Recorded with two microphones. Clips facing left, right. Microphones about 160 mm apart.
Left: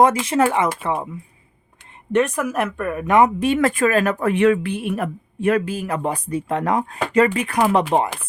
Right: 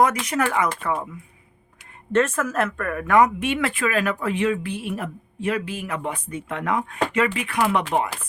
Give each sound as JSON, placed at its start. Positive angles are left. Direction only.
{"t": 0.3, "sound": "speech", "side_deg": 30}
{"t": 3.4, "sound": "speech", "side_deg": 40}